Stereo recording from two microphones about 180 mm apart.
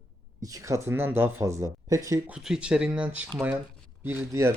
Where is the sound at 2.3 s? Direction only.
5° right (ahead or behind).